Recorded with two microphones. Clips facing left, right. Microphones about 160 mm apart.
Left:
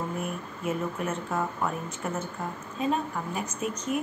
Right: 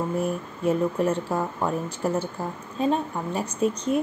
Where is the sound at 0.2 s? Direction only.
35° right (ahead or behind).